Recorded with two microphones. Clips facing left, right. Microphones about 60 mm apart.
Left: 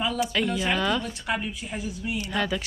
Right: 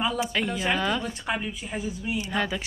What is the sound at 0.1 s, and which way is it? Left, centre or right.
Speech, right.